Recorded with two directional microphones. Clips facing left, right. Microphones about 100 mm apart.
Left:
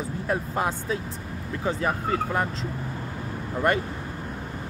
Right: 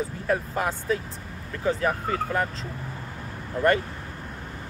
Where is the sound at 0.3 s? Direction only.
20° left (ahead or behind).